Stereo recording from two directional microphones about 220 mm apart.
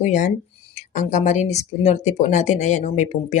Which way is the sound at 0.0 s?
35° left (ahead or behind).